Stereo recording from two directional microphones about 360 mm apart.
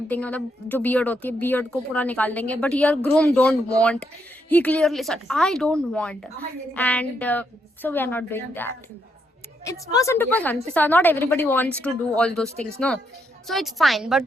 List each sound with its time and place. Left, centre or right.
0.1 s a woman's voice: centre
12.5 s speech: centre
13.5 s a woman's voice: centre